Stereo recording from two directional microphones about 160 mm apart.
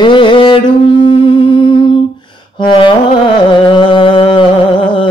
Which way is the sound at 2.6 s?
30° left (ahead or behind).